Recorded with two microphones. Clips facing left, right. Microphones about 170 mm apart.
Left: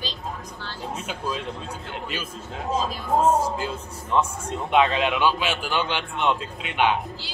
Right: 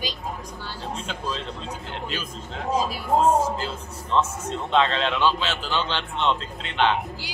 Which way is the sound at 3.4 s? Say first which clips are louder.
Even; 10° left (ahead or behind).